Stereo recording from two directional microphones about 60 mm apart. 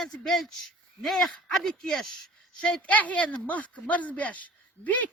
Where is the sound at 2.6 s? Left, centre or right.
Centre.